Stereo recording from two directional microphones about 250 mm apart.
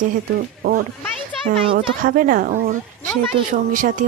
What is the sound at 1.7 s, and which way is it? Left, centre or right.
A woman's voice, right.